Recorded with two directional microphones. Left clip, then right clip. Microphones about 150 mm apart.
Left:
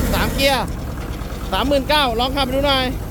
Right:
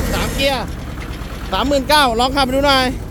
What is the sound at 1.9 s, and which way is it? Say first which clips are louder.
Speech: right 4 dB; 50° right (ahead or behind).